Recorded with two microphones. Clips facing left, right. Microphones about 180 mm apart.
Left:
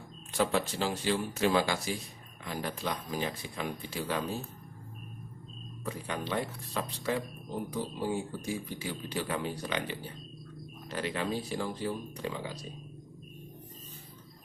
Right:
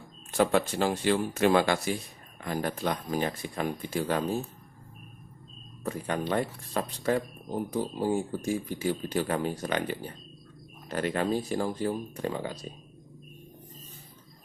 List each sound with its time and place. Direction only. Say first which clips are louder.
0.3 s speech: right 5 dB; 55° right (ahead or behind)
5.8 s speech: right 5 dB; 50° right (ahead or behind)